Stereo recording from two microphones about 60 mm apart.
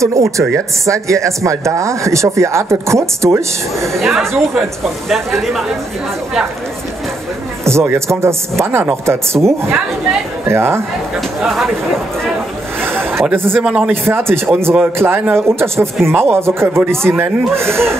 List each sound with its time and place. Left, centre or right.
0.0 s speech: right
3.9 s speech: centre
7.6 s speech: right
11.4 s speech: centre
12.8 s a sound: right
13.6 s speech: centre
14.0 s speech: right